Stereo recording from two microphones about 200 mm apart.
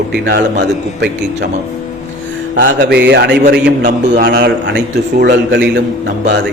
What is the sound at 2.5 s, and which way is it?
Mantra, 45° right (ahead or behind).